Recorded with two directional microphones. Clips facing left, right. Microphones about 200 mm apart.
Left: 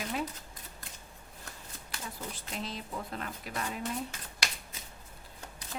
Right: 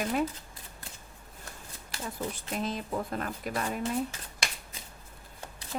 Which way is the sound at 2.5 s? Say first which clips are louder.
Right 6 dB; 50° right (ahead or behind).